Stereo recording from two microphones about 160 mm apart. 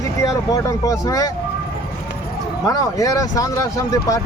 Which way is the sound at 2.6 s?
20° left (ahead or behind).